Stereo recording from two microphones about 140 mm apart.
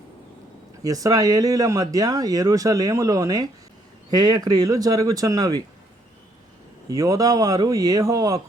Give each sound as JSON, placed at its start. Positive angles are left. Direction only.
{"t": 0.9, "sound": "speech", "side_deg": -25}
{"t": 6.9, "sound": "speech", "side_deg": -25}